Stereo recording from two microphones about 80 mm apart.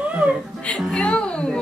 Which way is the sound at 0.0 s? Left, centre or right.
Centre.